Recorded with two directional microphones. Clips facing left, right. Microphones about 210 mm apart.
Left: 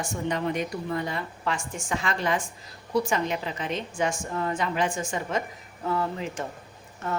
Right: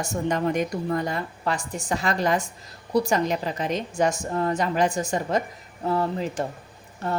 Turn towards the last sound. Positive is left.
turn(degrees=-35)  # may be behind; listen again after turning